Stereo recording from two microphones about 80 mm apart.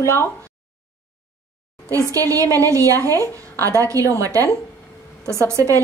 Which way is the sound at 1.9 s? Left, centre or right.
Right.